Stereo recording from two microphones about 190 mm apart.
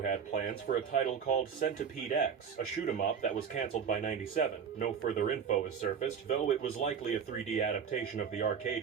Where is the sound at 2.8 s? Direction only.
40° left (ahead or behind).